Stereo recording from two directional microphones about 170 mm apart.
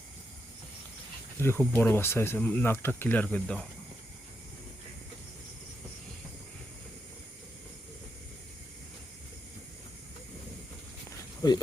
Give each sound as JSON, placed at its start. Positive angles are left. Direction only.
{"t": 1.4, "sound": "speech", "side_deg": 15}
{"t": 11.4, "sound": "speech", "side_deg": 25}